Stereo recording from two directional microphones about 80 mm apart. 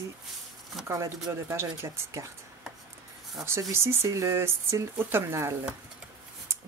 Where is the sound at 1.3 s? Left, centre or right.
Right.